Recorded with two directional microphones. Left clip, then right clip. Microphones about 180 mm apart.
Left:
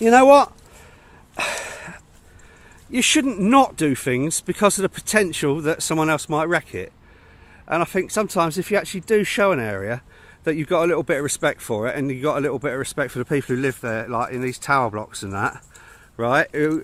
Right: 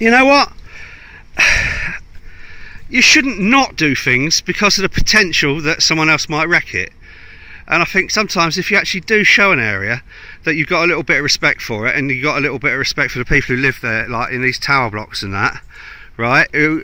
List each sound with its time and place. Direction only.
0.0 s speech: 10° right (ahead or behind)
1.4 s a sound: 15° right (ahead or behind)
2.9 s speech: 5° right (ahead or behind)